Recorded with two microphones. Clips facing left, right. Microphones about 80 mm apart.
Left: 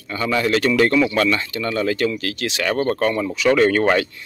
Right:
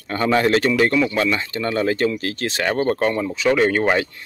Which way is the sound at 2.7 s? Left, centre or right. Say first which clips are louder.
Even; right.